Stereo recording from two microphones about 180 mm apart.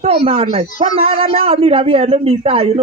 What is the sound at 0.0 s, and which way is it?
A man's voice, 35° right (ahead or behind).